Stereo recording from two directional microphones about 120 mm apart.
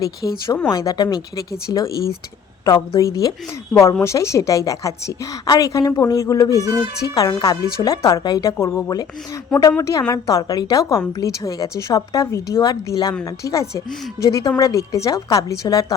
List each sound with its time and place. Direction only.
0.2 s a woman's voice: 30° left (ahead or behind)
3.7 s a woman's voice: centre (ahead or behind)
4.0 s a woman's voice: 25° left (ahead or behind)